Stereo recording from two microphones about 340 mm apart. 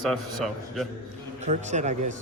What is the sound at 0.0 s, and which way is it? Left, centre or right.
Speech, centre.